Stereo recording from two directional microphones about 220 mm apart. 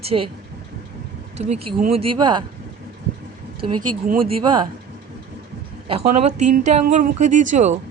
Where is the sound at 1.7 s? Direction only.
35° right (ahead or behind).